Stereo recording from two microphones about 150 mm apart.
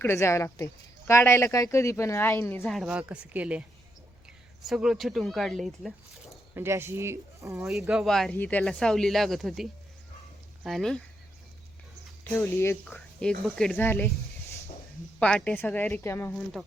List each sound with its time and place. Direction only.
0.0 s speech: 20° left (ahead or behind)
2.6 s speech: centre (ahead or behind)
6.5 s speech: 15° right (ahead or behind)
7.6 s speech: centre (ahead or behind)
12.2 s speech: 15° left (ahead or behind)
15.2 s speech: 10° left (ahead or behind)